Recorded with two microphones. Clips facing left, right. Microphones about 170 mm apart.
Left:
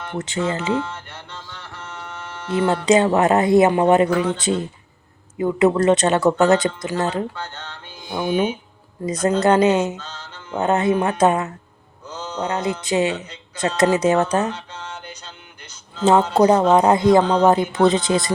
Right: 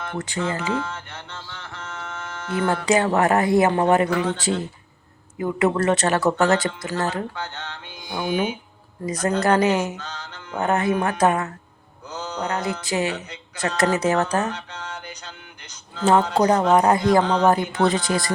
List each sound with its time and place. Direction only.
0.2 s speech: 20° left (ahead or behind)
2.5 s speech: 20° left (ahead or behind)
7.3 s music: 10° right (ahead or behind)
9.0 s speech: 20° left (ahead or behind)
12.0 s mantra: 10° right (ahead or behind)
12.4 s speech: 25° left (ahead or behind)
16.0 s speech: 25° left (ahead or behind)